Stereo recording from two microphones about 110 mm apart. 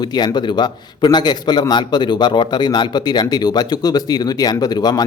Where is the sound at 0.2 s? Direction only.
40° left (ahead or behind).